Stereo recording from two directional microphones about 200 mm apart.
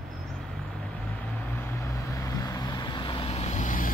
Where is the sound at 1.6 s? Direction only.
15° left (ahead or behind).